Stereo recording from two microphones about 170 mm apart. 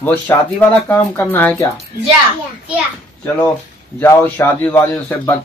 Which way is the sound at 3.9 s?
15° left (ahead or behind).